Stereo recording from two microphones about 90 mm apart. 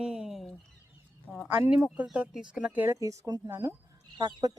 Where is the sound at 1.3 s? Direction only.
20° left (ahead or behind).